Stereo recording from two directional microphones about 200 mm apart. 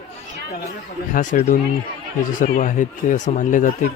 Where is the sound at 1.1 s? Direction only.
40° left (ahead or behind).